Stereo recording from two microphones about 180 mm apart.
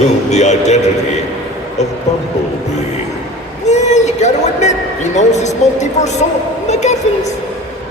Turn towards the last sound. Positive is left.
turn(degrees=40)  # may be behind; listen again after turning